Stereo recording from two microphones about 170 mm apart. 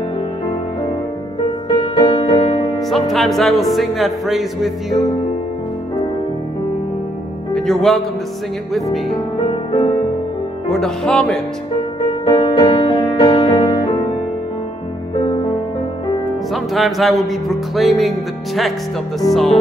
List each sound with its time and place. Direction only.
1.7 s music: 25° left (ahead or behind)
2.9 s speech: centre (ahead or behind)
7.5 s speech: 5° left (ahead or behind)
9.7 s music: 30° left (ahead or behind)
10.7 s speech: 5° left (ahead or behind)
12.1 s music: 30° left (ahead or behind)
15.1 s music: 30° left (ahead or behind)
16.5 s speech: centre (ahead or behind)